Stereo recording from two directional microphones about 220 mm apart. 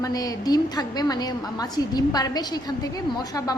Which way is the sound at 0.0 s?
15° left (ahead or behind).